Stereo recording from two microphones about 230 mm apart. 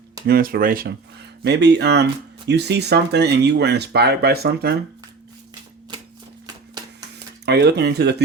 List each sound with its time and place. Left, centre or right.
0.3 s speech: right
7.4 s speech: right